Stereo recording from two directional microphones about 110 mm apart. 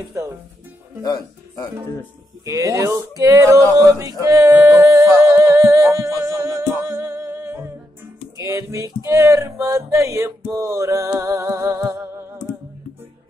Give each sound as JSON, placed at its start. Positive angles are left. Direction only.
{"t": 0.1, "sound": "speech", "side_deg": -25}
{"t": 1.0, "sound": "speech", "side_deg": 30}
{"t": 2.4, "sound": "speech", "side_deg": -30}
{"t": 10.5, "sound": "music", "side_deg": -30}